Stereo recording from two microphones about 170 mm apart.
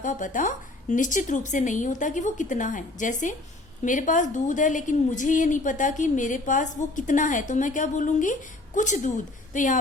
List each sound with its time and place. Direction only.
0.0 s a woman's voice: 50° left (ahead or behind)